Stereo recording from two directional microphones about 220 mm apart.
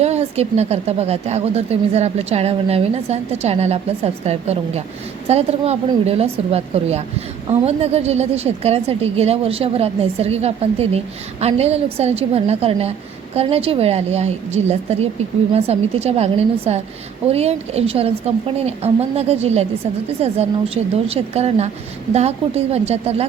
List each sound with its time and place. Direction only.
0.0 s speech: 30° right (ahead or behind)